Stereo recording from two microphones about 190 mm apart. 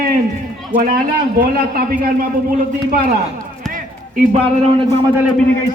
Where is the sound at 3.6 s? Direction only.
Centre (ahead or behind).